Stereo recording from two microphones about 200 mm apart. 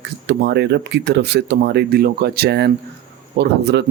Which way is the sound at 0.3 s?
55° right (ahead or behind).